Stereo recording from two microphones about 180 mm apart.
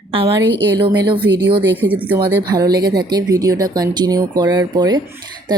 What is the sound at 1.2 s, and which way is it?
A woman's voice, 70° right (ahead or behind).